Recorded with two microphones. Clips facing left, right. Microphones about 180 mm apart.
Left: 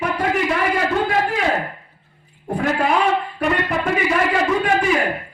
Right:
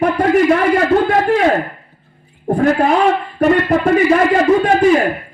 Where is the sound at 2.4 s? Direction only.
45° right (ahead or behind).